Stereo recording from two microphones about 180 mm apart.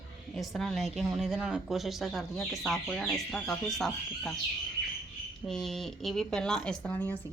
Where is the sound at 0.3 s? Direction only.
Centre (ahead or behind).